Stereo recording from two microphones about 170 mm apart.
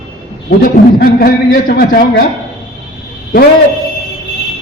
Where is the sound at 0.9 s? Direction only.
60° left (ahead or behind).